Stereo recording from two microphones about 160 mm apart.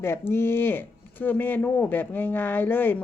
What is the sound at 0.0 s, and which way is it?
Speech, 15° left (ahead or behind).